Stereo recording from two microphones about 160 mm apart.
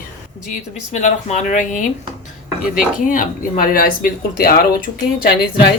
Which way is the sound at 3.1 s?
60° left (ahead or behind).